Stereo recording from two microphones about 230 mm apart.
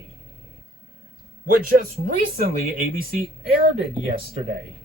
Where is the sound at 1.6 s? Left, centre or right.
Right.